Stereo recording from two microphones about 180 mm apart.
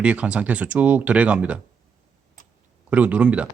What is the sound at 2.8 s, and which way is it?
Speech, 10° right (ahead or behind).